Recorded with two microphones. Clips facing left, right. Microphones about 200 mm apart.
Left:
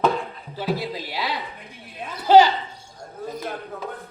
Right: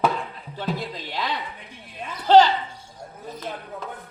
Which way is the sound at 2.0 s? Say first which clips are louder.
Left 1 dB; 10° left (ahead or behind).